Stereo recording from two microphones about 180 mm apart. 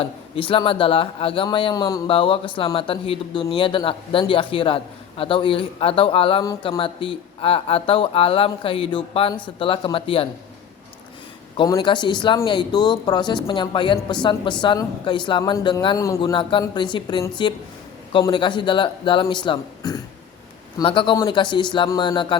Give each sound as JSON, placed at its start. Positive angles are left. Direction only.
{"t": 0.0, "sound": "speech", "side_deg": 30}
{"t": 6.4, "sound": "speech", "side_deg": 20}
{"t": 6.7, "sound": "speech", "side_deg": 30}
{"t": 11.5, "sound": "speech", "side_deg": 25}